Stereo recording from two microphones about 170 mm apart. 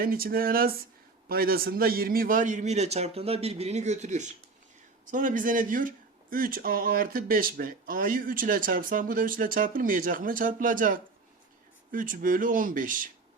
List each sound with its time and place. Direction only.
0.0 s a man's voice: 60° right (ahead or behind)